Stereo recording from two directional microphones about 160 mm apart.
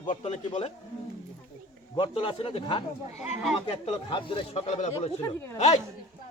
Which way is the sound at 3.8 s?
35° left (ahead or behind).